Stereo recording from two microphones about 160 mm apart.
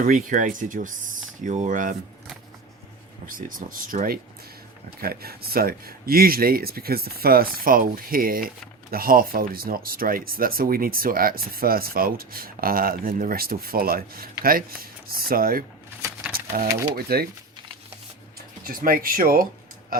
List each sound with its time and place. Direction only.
0.0 s speech: 55° right (ahead or behind)
3.2 s speech: 60° right (ahead or behind)
4.9 s speech: 70° right (ahead or behind)
16.3 s typewriter: 60° right (ahead or behind)
16.9 s speech: 75° right (ahead or behind)
18.7 s speech: 60° right (ahead or behind)
19.9 s a sound: 65° right (ahead or behind)